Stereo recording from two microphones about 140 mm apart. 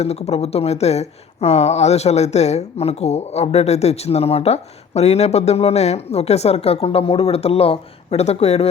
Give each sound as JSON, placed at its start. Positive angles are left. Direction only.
{"t": 0.0, "sound": "speech", "side_deg": 50}